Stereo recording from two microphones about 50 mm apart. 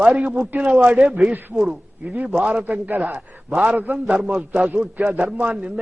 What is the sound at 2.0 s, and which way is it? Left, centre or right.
A man's voice, right.